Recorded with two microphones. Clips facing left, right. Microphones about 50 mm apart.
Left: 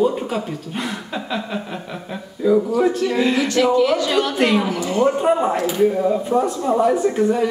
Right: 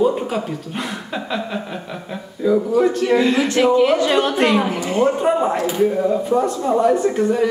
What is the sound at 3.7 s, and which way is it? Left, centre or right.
A woman's voice, right.